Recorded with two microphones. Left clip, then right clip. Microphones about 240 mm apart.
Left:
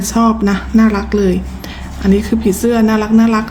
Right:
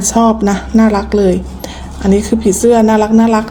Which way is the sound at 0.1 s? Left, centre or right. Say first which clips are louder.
Right 3 dB; left.